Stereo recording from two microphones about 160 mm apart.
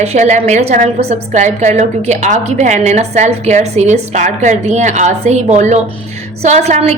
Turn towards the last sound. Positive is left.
turn(degrees=-45)  # may be behind; listen again after turning